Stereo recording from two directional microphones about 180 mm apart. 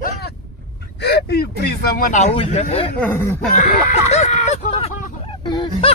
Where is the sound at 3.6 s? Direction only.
40° left (ahead or behind).